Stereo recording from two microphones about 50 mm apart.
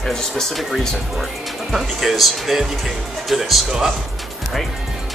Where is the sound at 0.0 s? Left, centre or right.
Centre.